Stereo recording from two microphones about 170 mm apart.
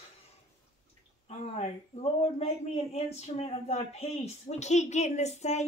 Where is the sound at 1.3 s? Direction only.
40° left (ahead or behind).